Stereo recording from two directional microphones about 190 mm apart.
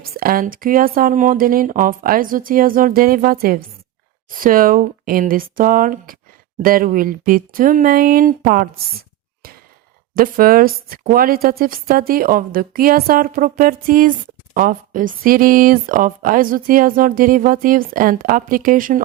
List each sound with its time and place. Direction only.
0.0 s speech: 50° right (ahead or behind)